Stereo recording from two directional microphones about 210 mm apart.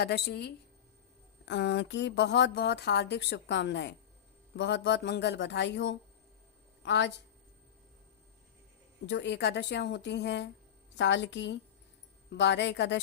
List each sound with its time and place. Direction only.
0.0 s speech: 50° left (ahead or behind)
9.0 s speech: 55° left (ahead or behind)